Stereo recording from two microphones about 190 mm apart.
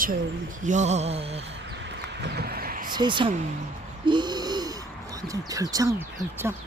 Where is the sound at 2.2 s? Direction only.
55° right (ahead or behind).